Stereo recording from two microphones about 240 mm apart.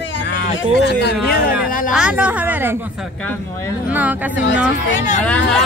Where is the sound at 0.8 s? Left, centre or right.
Left.